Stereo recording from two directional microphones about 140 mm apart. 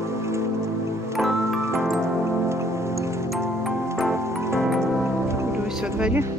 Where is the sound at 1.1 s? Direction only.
Centre (ahead or behind).